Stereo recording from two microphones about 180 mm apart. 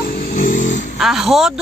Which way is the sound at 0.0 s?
55° left (ahead or behind).